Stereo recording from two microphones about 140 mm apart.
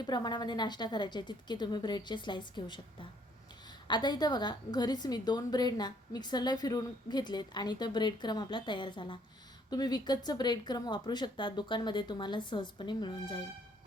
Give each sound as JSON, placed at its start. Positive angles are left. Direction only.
{"t": 0.0, "sound": "a woman's voice", "side_deg": 30}
{"t": 3.8, "sound": "a woman's voice", "side_deg": 30}